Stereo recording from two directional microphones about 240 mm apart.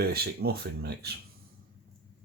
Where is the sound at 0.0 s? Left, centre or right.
Right.